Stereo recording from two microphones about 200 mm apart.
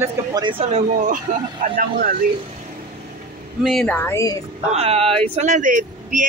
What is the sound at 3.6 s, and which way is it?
Speech, 5° left (ahead or behind).